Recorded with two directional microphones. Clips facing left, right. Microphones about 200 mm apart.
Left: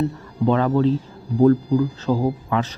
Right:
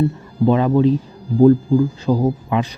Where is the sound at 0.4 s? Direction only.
15° right (ahead or behind).